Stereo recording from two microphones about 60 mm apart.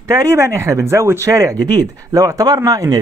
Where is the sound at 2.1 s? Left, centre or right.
Right.